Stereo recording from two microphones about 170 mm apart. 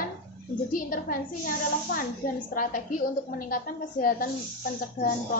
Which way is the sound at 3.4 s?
55° left (ahead or behind).